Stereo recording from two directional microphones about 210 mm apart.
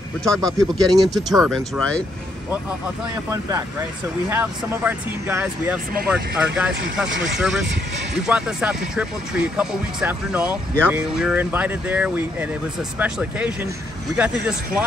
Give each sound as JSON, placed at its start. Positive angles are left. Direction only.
{"t": 0.2, "sound": "speech", "side_deg": 5}
{"t": 0.5, "sound": "speech", "side_deg": -15}
{"t": 1.0, "sound": "speech", "side_deg": 0}
{"t": 3.3, "sound": "speech", "side_deg": -15}